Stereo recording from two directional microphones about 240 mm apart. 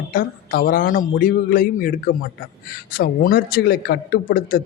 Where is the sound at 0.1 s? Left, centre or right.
Left.